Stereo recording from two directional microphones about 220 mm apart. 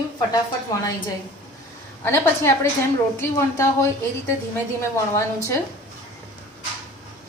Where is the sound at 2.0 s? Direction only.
10° left (ahead or behind).